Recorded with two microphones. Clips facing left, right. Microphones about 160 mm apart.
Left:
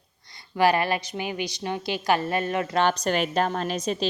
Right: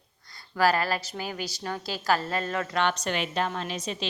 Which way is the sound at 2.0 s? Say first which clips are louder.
Left 2 dB; 20° left (ahead or behind).